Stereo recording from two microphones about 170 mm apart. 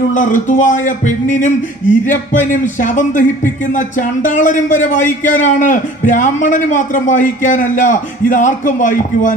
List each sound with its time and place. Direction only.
0.1 s a man's voice: 50° left (ahead or behind)